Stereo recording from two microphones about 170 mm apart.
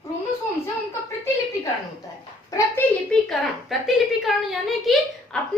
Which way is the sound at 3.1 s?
Centre (ahead or behind).